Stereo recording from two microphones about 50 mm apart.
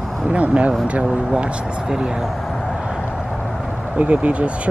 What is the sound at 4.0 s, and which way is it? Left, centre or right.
Speech, right.